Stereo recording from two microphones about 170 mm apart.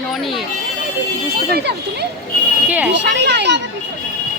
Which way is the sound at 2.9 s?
90° right.